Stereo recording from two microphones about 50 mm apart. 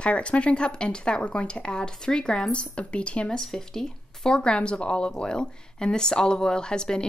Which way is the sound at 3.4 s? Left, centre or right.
Centre.